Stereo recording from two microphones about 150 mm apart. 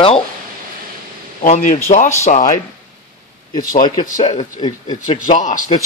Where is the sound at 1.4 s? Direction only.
55° left (ahead or behind).